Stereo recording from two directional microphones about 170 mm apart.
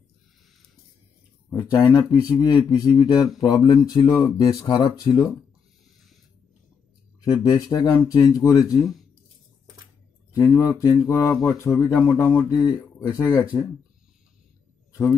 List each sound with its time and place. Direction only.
1.5 s speech: 25° left (ahead or behind)
7.2 s speech: 20° left (ahead or behind)
10.3 s speech: 20° left (ahead or behind)